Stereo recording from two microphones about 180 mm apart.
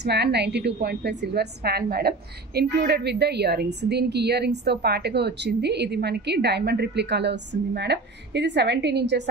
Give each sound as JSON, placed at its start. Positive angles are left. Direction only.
{"t": 0.0, "sound": "a woman's voice", "side_deg": -65}